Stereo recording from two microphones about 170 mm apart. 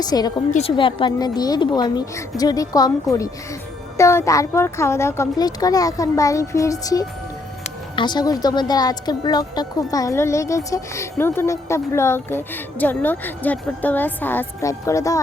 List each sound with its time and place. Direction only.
0.0 s speech: 25° left (ahead or behind)